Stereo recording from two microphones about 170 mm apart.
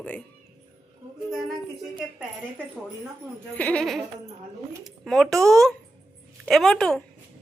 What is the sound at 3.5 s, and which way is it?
A woman's voice, 5° left (ahead or behind).